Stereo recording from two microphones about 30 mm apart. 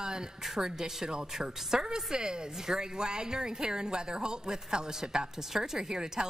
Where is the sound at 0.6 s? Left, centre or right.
Right.